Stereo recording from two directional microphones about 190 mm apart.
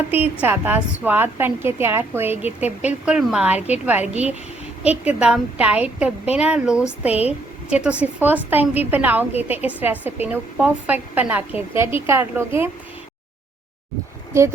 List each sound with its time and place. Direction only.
0.1 s a woman's voice: 10° right (ahead or behind)